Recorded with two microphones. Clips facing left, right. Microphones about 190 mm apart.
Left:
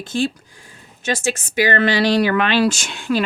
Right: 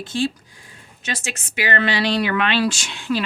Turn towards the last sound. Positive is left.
turn(degrees=50)  # may be behind; listen again after turning